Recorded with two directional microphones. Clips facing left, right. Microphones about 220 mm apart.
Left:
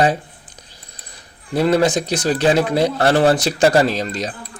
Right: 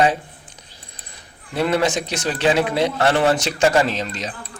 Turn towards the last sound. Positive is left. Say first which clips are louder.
# left 4 dB
turn(degrees=40)  # may be behind; listen again after turning